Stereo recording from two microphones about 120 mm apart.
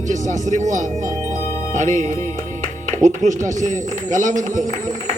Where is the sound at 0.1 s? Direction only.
90° right.